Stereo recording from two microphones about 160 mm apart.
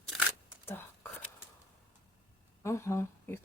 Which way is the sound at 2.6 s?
20° left (ahead or behind).